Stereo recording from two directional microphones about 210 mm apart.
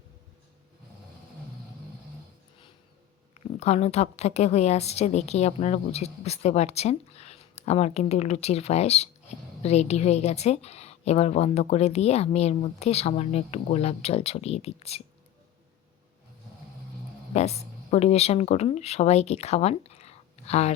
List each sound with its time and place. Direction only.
3.6 s a woman's voice: 30° left (ahead or behind)
17.3 s speech: 30° left (ahead or behind)